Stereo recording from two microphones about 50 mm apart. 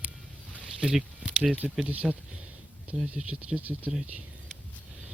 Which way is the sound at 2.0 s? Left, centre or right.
Centre.